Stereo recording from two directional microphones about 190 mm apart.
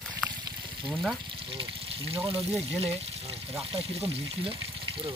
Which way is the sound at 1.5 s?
30° right (ahead or behind).